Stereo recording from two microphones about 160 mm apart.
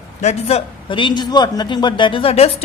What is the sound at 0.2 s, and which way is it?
A man's voice, 45° left (ahead or behind).